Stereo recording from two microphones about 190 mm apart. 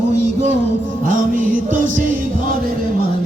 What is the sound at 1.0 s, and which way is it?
Music, 45° right (ahead or behind).